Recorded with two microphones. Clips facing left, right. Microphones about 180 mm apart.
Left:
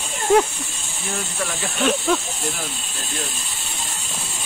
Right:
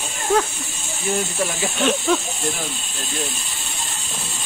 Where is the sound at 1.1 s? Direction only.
20° right (ahead or behind).